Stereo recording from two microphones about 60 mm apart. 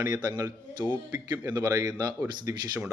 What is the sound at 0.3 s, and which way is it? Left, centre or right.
Speech, right.